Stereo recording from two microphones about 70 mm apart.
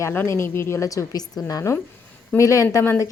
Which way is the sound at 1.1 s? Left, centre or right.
Left.